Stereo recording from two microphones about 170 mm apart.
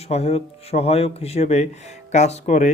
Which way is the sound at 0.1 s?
35° left (ahead or behind).